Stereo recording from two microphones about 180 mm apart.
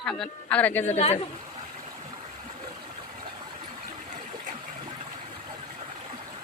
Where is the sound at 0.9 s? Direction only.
40° left (ahead or behind).